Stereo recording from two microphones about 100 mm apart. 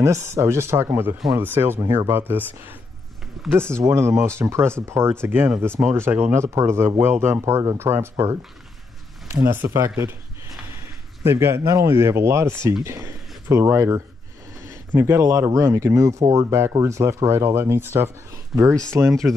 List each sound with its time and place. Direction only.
0.0 s speech: 30° right (ahead or behind)
9.5 s speech: 25° right (ahead or behind)
11.2 s speech: 25° right (ahead or behind)
18.5 s speech: 5° right (ahead or behind)
18.9 s speech: 30° right (ahead or behind)